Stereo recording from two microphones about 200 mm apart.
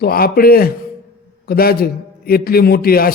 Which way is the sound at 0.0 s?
50° left (ahead or behind).